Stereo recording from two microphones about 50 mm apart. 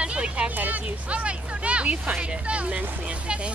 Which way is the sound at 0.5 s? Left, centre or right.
Right.